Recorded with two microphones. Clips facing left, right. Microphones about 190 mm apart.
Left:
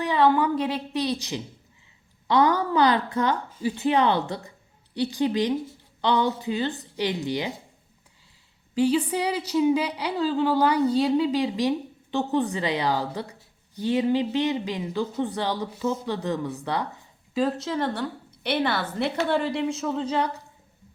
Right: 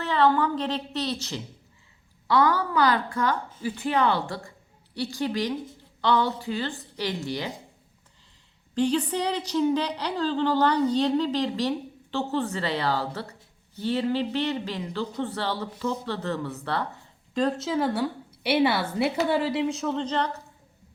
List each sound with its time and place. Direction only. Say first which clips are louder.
0.0 s a woman's voice: left 2 dB; 15° left (ahead or behind)
8.7 s a woman's voice: left 2 dB; 5° left (ahead or behind)
17.3 s a woman's voice: even; centre (ahead or behind)